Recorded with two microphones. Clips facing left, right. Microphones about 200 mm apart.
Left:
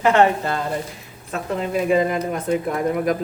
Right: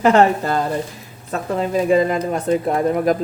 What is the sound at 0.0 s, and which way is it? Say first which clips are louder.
Speech: right 2 dB; 40° right (ahead or behind).